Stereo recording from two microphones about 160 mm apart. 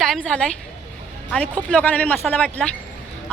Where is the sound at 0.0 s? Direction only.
5° left (ahead or behind).